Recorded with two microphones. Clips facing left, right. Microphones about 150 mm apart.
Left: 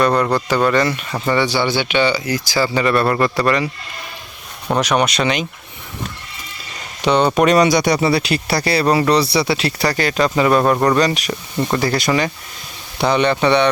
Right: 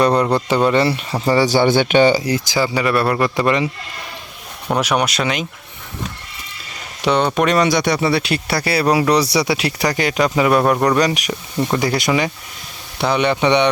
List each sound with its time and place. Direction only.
0.0 s speech: 30° right (ahead or behind); by 2.2 s 45° right (ahead or behind)
2.2 s speech: 25° right (ahead or behind)
2.6 s speech: 10° right (ahead or behind)
4.7 s speech: 5° right (ahead or behind)
7.0 s speech: centre (ahead or behind)
10.9 s speech: 15° right (ahead or behind)